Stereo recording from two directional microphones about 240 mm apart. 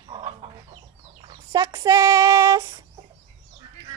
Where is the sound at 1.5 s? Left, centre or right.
Centre.